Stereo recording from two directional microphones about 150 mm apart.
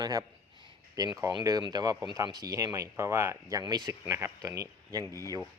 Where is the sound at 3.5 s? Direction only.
30° right (ahead or behind).